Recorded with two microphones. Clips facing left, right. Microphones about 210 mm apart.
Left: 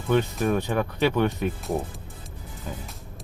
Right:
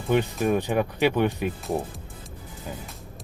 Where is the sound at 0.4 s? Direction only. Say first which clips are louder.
Right 1 dB; 15° right (ahead or behind).